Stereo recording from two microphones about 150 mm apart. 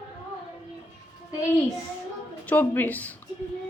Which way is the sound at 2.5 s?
10° left (ahead or behind).